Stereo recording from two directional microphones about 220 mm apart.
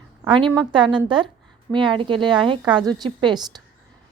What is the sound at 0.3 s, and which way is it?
Speech, 20° right (ahead or behind).